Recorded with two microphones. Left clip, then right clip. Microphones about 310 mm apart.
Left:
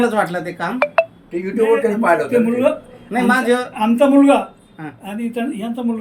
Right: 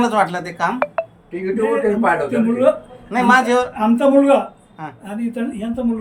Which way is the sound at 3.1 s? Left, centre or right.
Right.